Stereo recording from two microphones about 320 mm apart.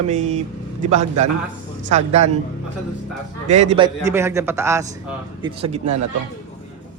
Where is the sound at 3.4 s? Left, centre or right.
Centre.